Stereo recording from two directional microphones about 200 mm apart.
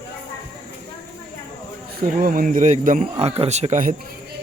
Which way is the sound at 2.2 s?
45° right (ahead or behind).